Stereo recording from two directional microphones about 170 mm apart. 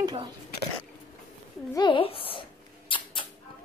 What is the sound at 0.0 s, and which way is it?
Speech, 25° right (ahead or behind).